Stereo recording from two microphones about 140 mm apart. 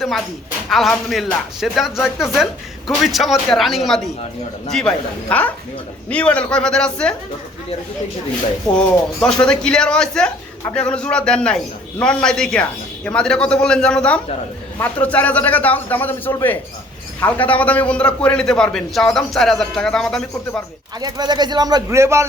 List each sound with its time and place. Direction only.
0.7 s a man's voice: centre (ahead or behind)
8.7 s a man's voice: 5° left (ahead or behind)
21.0 s speech: 30° right (ahead or behind)